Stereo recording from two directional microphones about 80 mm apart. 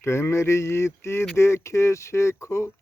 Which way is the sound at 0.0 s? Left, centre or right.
Left.